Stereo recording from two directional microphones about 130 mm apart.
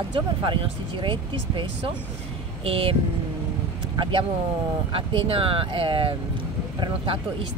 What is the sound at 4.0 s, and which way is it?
Speech, 40° right (ahead or behind).